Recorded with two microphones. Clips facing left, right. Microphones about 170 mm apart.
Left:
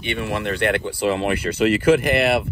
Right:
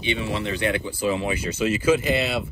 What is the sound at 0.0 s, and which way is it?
Speech, 60° left (ahead or behind).